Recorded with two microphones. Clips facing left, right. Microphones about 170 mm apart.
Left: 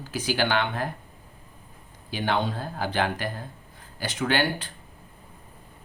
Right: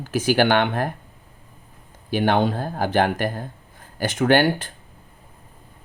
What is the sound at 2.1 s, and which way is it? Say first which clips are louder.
Speech: right 7 dB; 50° right (ahead or behind).